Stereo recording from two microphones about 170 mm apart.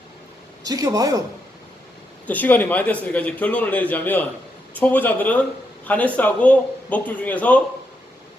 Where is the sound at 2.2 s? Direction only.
10° left (ahead or behind).